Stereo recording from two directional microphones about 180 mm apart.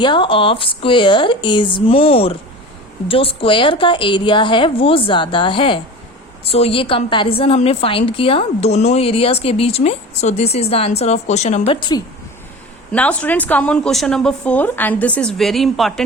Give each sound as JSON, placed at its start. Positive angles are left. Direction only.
{"t": 0.0, "sound": "a woman's voice", "side_deg": 25}
{"t": 12.9, "sound": "a woman's voice", "side_deg": 5}